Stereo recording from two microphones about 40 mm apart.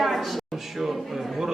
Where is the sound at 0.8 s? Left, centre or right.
Centre.